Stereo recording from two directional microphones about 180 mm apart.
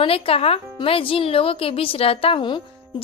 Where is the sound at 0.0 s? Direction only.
30° left (ahead or behind).